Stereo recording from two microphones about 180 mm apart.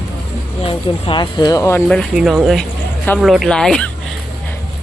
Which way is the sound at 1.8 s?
Centre (ahead or behind).